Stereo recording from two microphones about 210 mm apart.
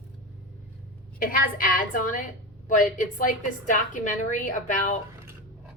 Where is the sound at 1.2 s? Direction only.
40° left (ahead or behind).